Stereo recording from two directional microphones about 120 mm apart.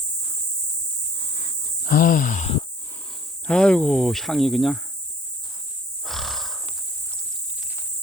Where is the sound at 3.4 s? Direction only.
10° left (ahead or behind).